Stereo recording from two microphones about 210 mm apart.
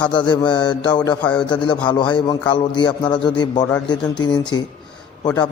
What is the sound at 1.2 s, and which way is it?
Speech, 5° left (ahead or behind).